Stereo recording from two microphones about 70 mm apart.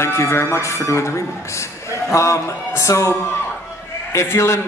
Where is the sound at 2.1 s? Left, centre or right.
Left.